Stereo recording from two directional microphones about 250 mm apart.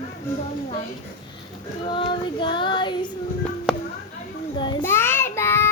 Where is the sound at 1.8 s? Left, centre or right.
Centre.